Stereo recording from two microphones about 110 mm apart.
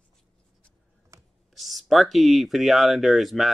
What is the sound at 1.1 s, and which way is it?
Computer keyboard, 30° right (ahead or behind).